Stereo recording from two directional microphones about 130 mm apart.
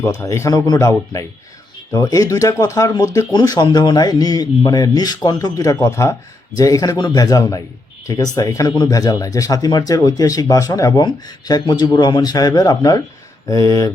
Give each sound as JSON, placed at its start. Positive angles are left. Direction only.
{"t": 0.0, "sound": "speech", "side_deg": 20}